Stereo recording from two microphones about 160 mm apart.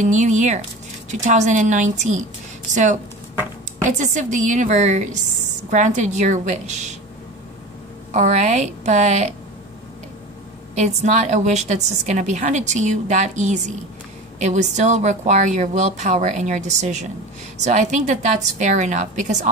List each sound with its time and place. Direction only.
0.0 s a woman's voice: 50° right (ahead or behind)
8.1 s a woman's voice: 50° right (ahead or behind)
10.7 s a woman's voice: 45° right (ahead or behind)